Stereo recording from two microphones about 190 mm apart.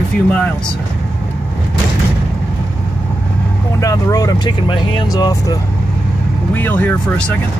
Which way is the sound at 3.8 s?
20° left (ahead or behind).